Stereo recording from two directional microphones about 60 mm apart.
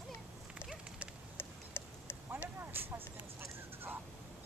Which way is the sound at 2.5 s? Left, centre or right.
Right.